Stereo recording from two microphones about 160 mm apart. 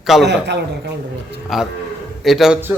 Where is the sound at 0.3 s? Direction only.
90° right.